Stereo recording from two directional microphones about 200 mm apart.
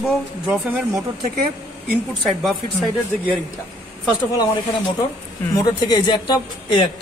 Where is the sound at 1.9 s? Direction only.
5° right (ahead or behind).